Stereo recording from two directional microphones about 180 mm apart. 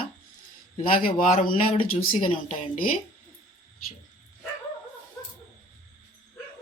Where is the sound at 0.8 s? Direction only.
50° left (ahead or behind).